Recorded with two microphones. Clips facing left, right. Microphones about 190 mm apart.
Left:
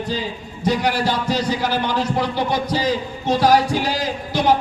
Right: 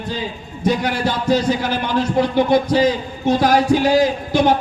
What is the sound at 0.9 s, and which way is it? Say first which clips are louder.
Speech: right 2 dB; 50° right (ahead or behind).